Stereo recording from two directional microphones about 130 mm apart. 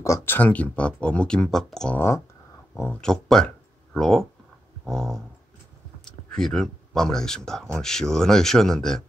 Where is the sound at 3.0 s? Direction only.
5° left (ahead or behind).